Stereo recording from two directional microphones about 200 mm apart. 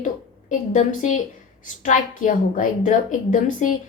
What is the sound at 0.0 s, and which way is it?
A woman's voice, 40° left (ahead or behind).